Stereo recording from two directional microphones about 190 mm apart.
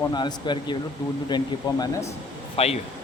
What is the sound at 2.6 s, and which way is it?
Speech, 30° left (ahead or behind).